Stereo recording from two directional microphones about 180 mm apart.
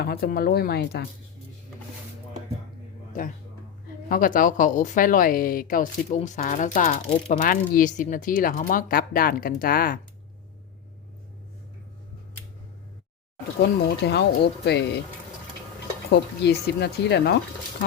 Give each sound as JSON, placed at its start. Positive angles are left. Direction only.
{"t": 0.0, "sound": "speech", "side_deg": 55}
{"t": 3.1, "sound": "speech", "side_deg": 50}
{"t": 6.1, "sound": "speech", "side_deg": 40}
{"t": 13.8, "sound": "speech", "side_deg": 65}
{"t": 16.4, "sound": "speech", "side_deg": 70}